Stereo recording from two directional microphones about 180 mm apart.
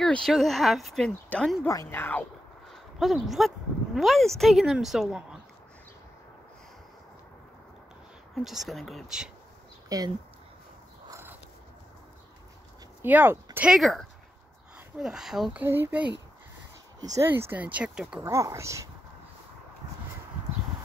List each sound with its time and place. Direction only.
0.0 s speech: 5° left (ahead or behind)
2.7 s speech: centre (ahead or behind)
8.5 s speech: centre (ahead or behind)
9.8 s speech: 20° right (ahead or behind)
11.1 s a sound: 15° right (ahead or behind)
13.0 s speech: 10° right (ahead or behind)
18.2 s speech: 15° right (ahead or behind)